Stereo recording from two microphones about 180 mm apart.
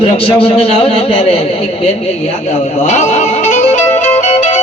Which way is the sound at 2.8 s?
40° left (ahead or behind).